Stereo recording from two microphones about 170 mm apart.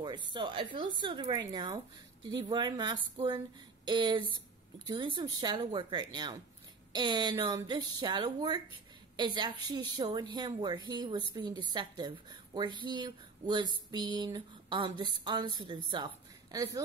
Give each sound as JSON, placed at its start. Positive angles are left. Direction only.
{"t": 0.3, "sound": "a woman's voice", "side_deg": -30}